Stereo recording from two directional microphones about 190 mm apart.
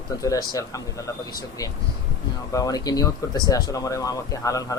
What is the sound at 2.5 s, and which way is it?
A man's voice, 20° left (ahead or behind).